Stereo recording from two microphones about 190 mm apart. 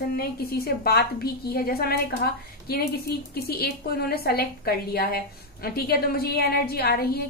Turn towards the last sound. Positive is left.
turn(degrees=55)  # may be behind; listen again after turning